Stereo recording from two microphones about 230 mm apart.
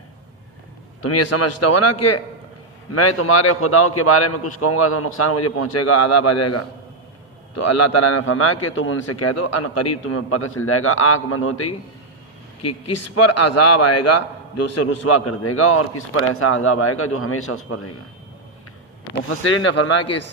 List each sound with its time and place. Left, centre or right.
1.0 s a man's voice: left
2.9 s a man's voice: left
8.2 s a man's voice: left
12.6 s a man's voice: left
19.3 s a man's voice: left